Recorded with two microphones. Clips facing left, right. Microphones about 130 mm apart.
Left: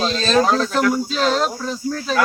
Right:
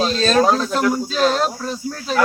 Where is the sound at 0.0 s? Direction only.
5° right (ahead or behind).